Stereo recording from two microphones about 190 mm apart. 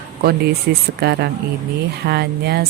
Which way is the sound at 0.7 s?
60° right (ahead or behind).